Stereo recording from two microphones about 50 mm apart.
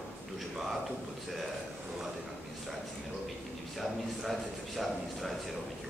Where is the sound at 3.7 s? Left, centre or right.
Centre.